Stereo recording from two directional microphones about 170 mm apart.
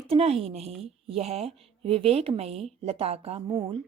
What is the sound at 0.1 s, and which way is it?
A woman's voice, 35° right (ahead or behind).